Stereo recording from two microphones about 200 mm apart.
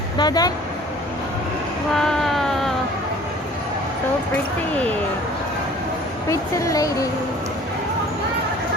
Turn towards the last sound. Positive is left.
turn(degrees=15)  # may be behind; listen again after turning